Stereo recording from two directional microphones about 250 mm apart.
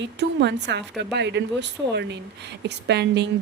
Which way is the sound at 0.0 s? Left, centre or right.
Right.